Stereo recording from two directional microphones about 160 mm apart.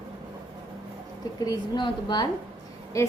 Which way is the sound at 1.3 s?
25° left (ahead or behind).